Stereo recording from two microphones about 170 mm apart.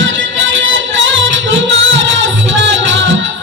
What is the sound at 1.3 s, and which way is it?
Music, 90° right.